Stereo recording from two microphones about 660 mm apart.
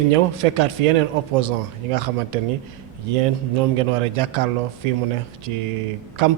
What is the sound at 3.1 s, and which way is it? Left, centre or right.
A man's voice, right.